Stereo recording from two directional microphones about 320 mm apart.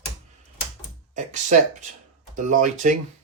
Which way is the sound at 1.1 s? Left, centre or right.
Right.